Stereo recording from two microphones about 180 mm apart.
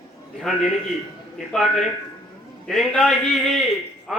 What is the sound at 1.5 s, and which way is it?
A man's voice, centre (ahead or behind).